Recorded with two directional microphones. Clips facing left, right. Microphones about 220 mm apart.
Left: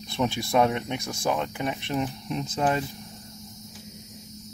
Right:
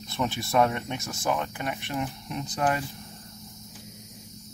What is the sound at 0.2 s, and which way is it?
Speech, 15° left (ahead or behind).